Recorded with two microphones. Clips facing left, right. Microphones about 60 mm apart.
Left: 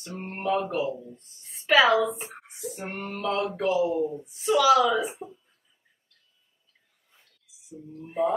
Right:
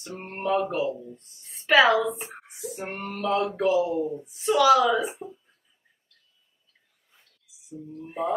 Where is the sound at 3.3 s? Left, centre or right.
Right.